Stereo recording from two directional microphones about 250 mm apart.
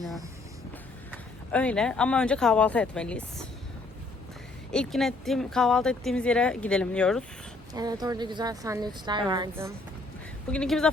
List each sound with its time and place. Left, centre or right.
1.5 s speech: centre
4.7 s speech: centre
7.7 s a woman's voice: centre
10.5 s speech: centre